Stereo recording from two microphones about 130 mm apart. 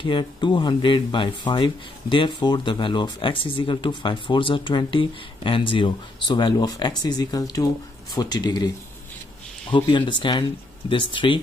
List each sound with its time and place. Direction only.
0.0 s speech: 40° left (ahead or behind)
9.7 s speech: 35° left (ahead or behind)